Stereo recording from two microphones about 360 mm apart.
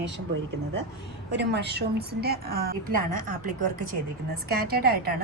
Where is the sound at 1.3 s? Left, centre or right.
Right.